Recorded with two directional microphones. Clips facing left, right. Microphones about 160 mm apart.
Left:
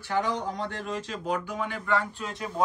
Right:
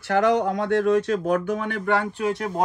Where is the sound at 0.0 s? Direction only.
80° right.